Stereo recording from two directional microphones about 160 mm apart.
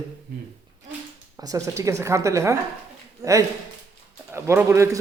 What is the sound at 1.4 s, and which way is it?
A man's voice, 20° right (ahead or behind).